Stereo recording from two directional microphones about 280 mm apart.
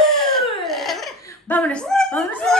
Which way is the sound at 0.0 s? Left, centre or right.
Centre.